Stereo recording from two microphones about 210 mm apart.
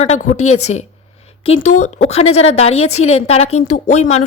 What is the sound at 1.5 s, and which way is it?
Speech, 90° left.